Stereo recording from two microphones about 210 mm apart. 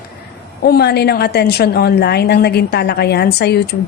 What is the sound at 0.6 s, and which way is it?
A woman's voice, 50° left (ahead or behind).